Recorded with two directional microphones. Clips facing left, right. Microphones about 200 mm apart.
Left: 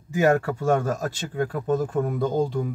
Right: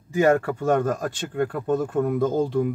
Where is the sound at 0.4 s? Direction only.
5° left (ahead or behind).